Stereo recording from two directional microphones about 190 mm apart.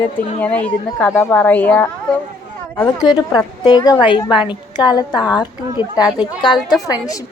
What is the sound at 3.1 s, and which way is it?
A woman's voice, 20° left (ahead or behind).